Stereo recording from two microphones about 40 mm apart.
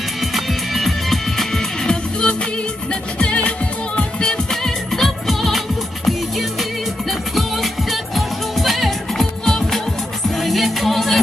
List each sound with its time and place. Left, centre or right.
0.2 s music: centre; by 4.4 s left
4.6 s music: centre
9.4 s music: centre
10.3 s music: centre